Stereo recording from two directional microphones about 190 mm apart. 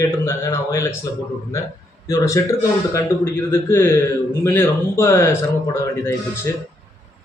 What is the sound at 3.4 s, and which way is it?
Speech, 15° left (ahead or behind).